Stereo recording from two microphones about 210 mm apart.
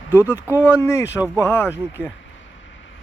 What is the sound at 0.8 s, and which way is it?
Speech, 10° left (ahead or behind).